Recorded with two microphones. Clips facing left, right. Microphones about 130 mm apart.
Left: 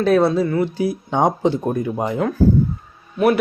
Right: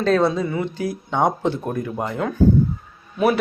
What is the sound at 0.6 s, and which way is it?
Speech, 10° left (ahead or behind).